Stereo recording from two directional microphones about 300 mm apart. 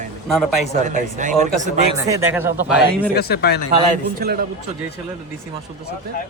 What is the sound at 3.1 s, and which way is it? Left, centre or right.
Speech, left.